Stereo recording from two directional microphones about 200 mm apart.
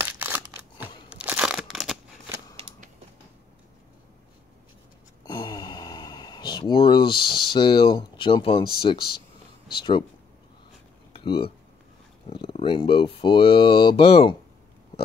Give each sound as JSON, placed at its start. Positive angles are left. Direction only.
{"t": 0.0, "sound": "scissors", "side_deg": -10}
{"t": 1.1, "sound": "tearing", "side_deg": -5}
{"t": 5.2, "sound": "sigh", "side_deg": 20}
{"t": 6.7, "sound": "speech", "side_deg": 25}
{"t": 11.1, "sound": "speech", "side_deg": 25}